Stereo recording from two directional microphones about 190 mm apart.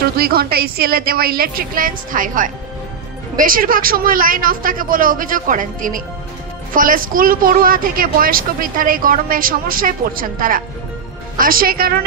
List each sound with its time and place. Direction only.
0.0 s speech: 55° right (ahead or behind)